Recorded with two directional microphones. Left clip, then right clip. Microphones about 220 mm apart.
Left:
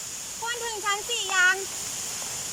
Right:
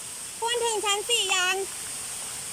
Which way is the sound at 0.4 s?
15° right (ahead or behind).